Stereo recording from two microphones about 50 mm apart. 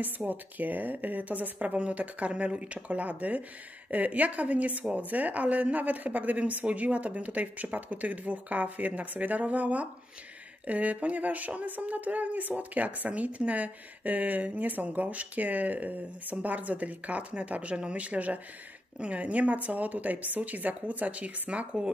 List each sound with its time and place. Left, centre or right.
0.3 s speech: right